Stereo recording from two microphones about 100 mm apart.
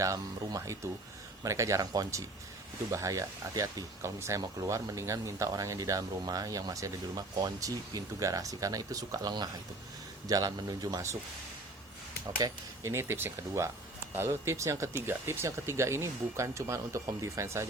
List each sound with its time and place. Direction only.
0.0 s speech: 35° right (ahead or behind)
12.4 s speech: 30° right (ahead or behind)